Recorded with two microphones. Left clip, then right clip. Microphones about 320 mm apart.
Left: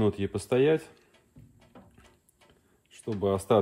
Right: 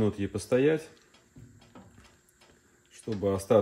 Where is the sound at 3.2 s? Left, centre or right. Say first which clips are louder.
Even; centre.